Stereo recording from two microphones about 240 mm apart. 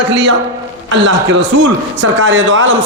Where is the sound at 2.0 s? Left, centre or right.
Right.